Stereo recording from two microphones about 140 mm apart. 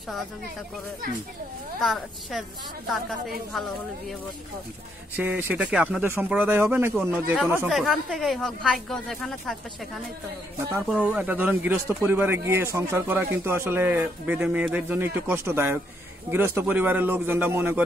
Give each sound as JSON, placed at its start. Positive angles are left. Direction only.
{"t": 1.8, "sound": "speech", "side_deg": 0}
{"t": 5.1, "sound": "speech", "side_deg": -15}
{"t": 7.7, "sound": "speech", "side_deg": 0}
{"t": 10.9, "sound": "speech", "side_deg": -10}